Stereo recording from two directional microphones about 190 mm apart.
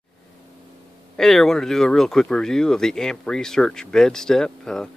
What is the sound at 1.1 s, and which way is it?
Speech, centre (ahead or behind).